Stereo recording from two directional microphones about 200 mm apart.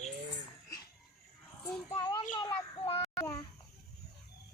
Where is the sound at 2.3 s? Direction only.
20° left (ahead or behind).